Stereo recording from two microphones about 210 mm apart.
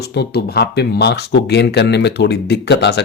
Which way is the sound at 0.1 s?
50° left (ahead or behind).